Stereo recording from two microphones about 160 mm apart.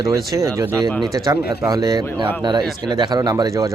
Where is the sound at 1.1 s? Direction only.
20° right (ahead or behind).